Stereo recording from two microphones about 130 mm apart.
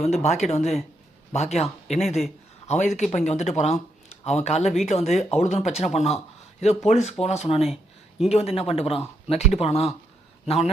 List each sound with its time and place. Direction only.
0.0 s a man's voice: 55° left (ahead or behind)